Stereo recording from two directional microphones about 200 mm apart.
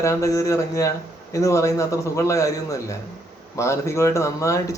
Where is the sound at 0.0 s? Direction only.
15° left (ahead or behind).